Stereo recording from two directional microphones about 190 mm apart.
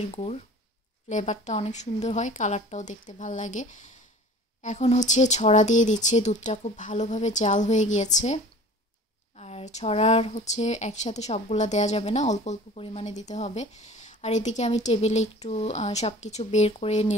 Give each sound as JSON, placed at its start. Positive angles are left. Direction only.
{"t": 0.1, "sound": "speech", "side_deg": 35}
{"t": 9.4, "sound": "speech", "side_deg": 35}